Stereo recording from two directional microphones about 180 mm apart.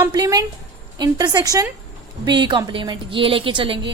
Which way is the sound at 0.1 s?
20° right (ahead or behind).